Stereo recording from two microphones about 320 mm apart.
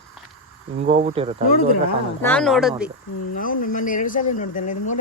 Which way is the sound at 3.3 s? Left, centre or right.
Left.